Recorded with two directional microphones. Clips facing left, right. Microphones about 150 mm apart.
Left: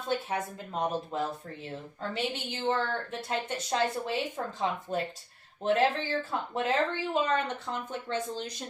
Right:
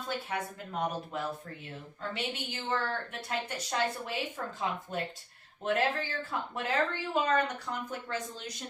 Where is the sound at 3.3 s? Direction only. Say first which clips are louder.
Left 3 dB; 25° left (ahead or behind).